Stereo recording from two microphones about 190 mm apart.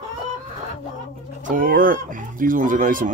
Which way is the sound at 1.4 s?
45° right (ahead or behind).